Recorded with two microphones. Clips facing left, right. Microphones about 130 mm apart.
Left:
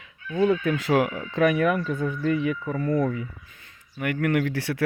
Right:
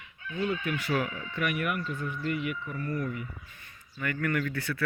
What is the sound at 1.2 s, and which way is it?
Speech, 90° left.